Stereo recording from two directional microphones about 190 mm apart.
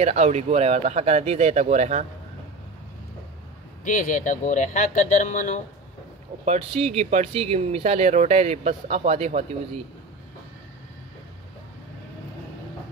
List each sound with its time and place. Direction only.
0.0 s speech: 35° right (ahead or behind)
3.8 s speech: 40° left (ahead or behind)
6.4 s speech: 35° right (ahead or behind)